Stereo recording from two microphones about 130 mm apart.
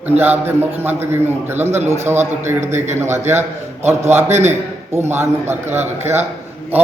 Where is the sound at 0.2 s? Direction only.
15° right (ahead or behind).